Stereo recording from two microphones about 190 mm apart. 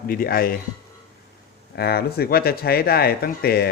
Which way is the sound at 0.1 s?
50° left (ahead or behind).